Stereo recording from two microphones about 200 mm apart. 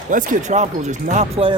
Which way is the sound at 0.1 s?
40° right (ahead or behind).